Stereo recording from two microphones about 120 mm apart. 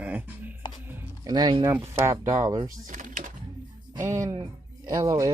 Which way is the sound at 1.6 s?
25° right (ahead or behind).